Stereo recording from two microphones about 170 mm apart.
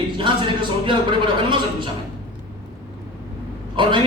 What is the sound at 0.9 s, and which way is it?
A man's voice, 30° right (ahead or behind).